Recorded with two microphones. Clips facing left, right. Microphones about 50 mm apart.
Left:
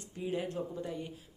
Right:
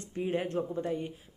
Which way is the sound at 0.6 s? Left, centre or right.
Right.